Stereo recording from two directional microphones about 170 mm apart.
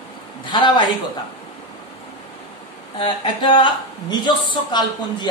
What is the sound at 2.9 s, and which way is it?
A woman's voice, 30° left (ahead or behind).